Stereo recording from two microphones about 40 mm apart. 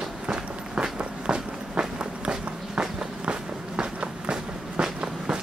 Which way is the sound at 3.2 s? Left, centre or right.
Right.